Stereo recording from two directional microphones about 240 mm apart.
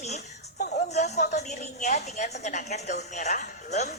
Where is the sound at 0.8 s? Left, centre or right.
Left.